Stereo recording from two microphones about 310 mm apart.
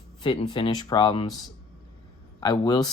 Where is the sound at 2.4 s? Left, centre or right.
Centre.